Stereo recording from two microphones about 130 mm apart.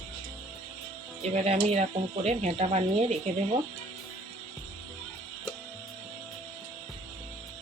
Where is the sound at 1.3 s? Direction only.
55° right (ahead or behind).